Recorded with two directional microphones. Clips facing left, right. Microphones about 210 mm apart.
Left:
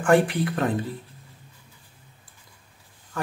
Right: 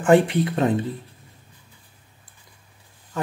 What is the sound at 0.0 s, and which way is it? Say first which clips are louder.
Speech: right 3 dB; 20° right (ahead or behind).